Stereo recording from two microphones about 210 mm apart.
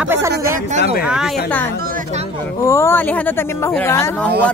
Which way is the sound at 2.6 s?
15° left (ahead or behind).